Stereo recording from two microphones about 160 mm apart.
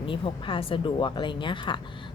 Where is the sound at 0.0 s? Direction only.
30° left (ahead or behind).